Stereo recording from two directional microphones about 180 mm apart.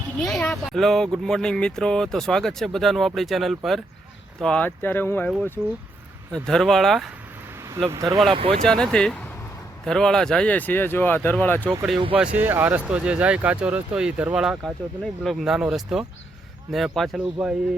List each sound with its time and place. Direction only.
0.2 s speech: centre (ahead or behind)
6.3 s speech: 5° left (ahead or behind)
7.9 s speech: 20° right (ahead or behind)
8.3 s speech: 30° right (ahead or behind)
8.6 s speech: 5° left (ahead or behind)
12.1 s speech: 10° right (ahead or behind)